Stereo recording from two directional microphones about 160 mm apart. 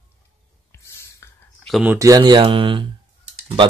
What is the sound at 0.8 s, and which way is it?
Whispering, 15° left (ahead or behind).